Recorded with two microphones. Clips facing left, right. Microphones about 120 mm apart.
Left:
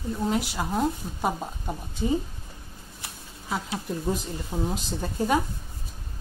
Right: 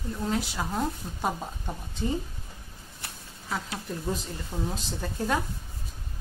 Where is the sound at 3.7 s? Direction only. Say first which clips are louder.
Left 4 dB; 15° left (ahead or behind).